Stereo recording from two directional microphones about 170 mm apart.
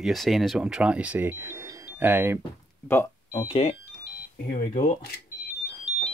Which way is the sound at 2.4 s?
15° left (ahead or behind).